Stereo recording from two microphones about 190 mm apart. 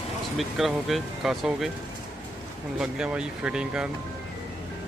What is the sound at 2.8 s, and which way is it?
Speech, 5° right (ahead or behind).